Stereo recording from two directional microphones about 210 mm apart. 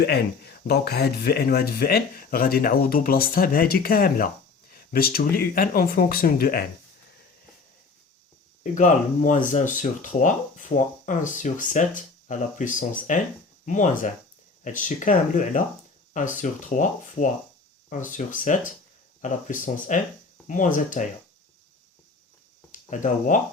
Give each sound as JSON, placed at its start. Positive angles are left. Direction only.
{"t": 0.0, "sound": "speech", "side_deg": 50}
{"t": 8.6, "sound": "speech", "side_deg": 35}
{"t": 22.7, "sound": "speech", "side_deg": 35}